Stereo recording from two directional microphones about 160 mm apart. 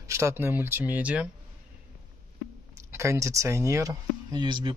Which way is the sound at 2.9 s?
20° right (ahead or behind).